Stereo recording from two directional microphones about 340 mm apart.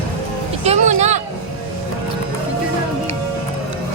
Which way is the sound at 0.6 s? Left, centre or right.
Centre.